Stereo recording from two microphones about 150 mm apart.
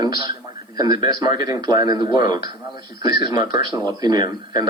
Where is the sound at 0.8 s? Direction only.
30° right (ahead or behind).